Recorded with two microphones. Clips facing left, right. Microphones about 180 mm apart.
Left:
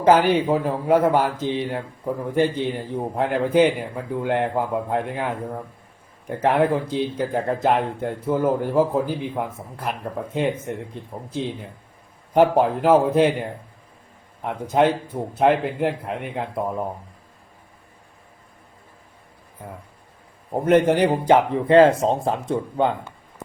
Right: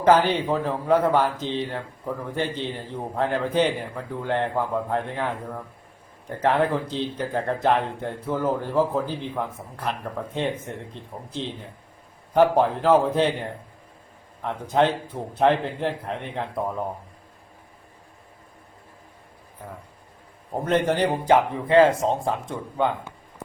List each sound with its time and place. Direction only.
0.0 s speech: 10° left (ahead or behind)
14.4 s speech: 10° left (ahead or behind)
20.5 s speech: 15° left (ahead or behind)